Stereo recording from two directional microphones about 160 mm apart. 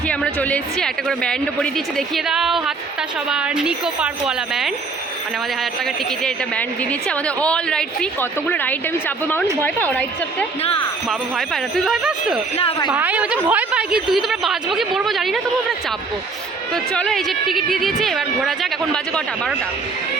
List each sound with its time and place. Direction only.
0.1 s a woman's voice: 10° left (ahead or behind)
7.1 s a woman's voice: 5° left (ahead or behind)
11.3 s a woman's voice: centre (ahead or behind)
12.5 s speech: 35° left (ahead or behind)
12.9 s a woman's voice: 10° right (ahead or behind)
16.7 s a woman's voice: 5° left (ahead or behind)